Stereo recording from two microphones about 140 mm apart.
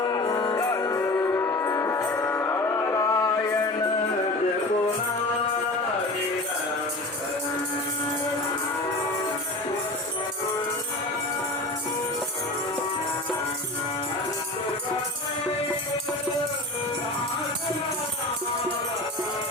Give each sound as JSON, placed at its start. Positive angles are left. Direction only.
{"t": 0.0, "sound": "music", "side_deg": 30}